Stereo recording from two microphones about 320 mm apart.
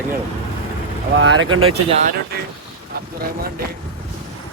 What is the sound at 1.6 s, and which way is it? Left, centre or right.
Speech, centre.